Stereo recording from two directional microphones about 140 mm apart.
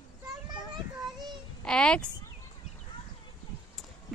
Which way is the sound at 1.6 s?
5° left (ahead or behind).